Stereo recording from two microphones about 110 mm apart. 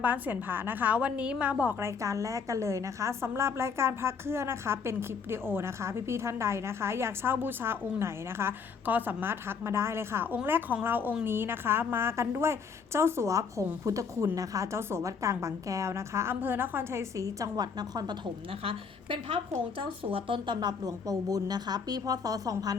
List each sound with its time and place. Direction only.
0.0 s a woman's voice: 15° right (ahead or behind)
1.8 s a woman's voice: 30° right (ahead or behind)
18.6 s a woman's voice: 55° right (ahead or behind); by 22.7 s 35° right (ahead or behind)